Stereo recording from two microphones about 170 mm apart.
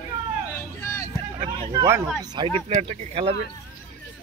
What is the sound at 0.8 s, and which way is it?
Vehicle, 15° left (ahead or behind).